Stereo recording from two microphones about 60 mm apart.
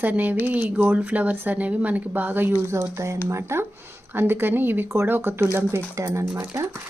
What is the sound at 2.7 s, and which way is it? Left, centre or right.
Speech, right.